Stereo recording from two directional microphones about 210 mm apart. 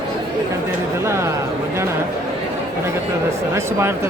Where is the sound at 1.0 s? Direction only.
10° right (ahead or behind).